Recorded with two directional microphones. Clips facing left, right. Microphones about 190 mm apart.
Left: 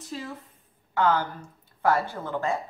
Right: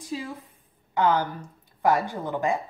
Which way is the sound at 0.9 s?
15° right (ahead or behind).